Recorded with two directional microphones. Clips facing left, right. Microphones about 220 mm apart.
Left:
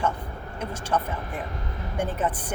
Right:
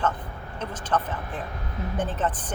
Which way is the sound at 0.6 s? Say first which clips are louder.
Even; 10° left (ahead or behind).